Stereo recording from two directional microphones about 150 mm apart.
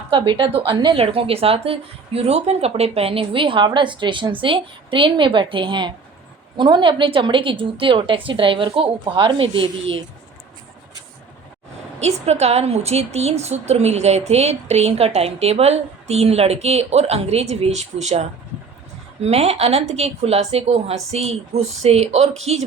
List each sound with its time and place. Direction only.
0.1 s speech: 35° right (ahead or behind)
11.9 s a woman's voice: 45° right (ahead or behind)